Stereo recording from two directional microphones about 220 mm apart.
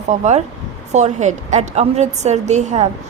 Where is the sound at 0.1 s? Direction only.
35° right (ahead or behind).